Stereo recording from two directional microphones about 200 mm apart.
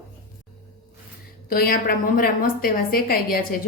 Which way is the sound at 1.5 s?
45° left (ahead or behind).